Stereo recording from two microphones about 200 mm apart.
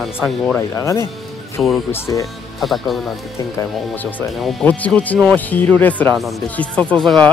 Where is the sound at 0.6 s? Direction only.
15° left (ahead or behind).